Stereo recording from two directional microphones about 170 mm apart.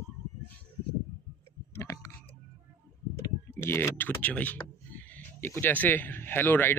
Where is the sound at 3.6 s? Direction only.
15° left (ahead or behind).